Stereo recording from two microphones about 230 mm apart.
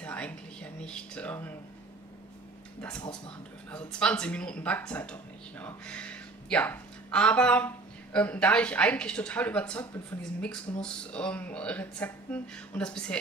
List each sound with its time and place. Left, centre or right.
0.0 s speech: centre
3.7 s speech: centre